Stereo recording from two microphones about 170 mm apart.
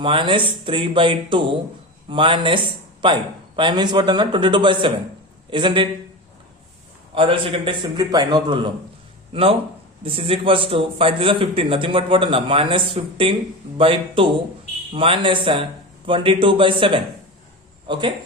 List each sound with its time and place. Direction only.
0.0 s a man's voice: 30° right (ahead or behind)
7.1 s a man's voice: 30° right (ahead or behind)